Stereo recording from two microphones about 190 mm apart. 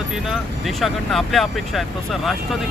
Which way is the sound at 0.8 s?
Centre (ahead or behind).